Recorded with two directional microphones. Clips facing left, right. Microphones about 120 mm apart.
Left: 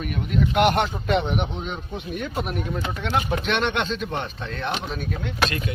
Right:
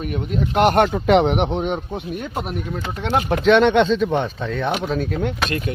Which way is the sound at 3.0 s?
40° right (ahead or behind).